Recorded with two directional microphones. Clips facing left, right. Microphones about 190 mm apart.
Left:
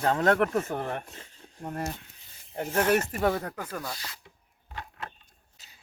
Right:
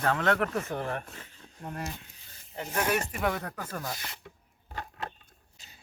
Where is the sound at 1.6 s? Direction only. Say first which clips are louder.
Left 4 dB; 45° left (ahead or behind).